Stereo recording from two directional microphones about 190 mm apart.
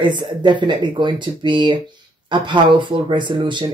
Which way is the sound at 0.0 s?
25° right (ahead or behind).